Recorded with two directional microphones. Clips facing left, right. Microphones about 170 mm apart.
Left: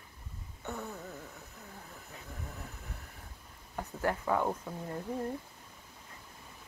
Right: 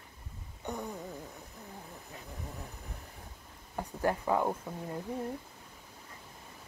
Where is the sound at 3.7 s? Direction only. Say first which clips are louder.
Right 2 dB; 20° right (ahead or behind).